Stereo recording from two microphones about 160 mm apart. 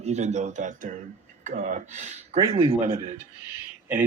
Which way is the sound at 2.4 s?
35° right (ahead or behind).